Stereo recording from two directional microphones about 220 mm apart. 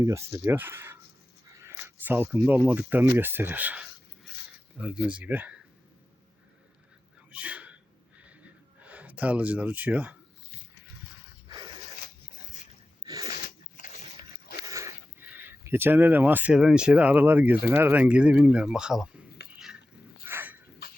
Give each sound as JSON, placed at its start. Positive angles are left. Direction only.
{"t": 0.0, "sound": "speech", "side_deg": -15}
{"t": 7.3, "sound": "a sound", "side_deg": -5}
{"t": 8.8, "sound": "speech", "side_deg": -5}
{"t": 11.4, "sound": "zipper", "side_deg": -20}
{"t": 13.7, "sound": "biting", "side_deg": 35}
{"t": 14.6, "sound": "speech", "side_deg": -15}
{"t": 19.5, "sound": "a sound", "side_deg": 0}
{"t": 20.2, "sound": "dog", "side_deg": -10}